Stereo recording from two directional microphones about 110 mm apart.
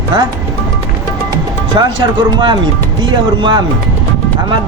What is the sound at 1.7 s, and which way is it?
Speech, 45° right (ahead or behind).